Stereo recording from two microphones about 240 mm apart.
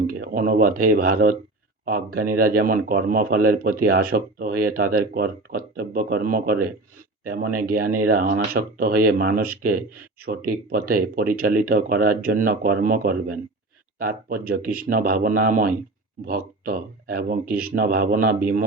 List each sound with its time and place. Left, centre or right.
0.1 s speech: right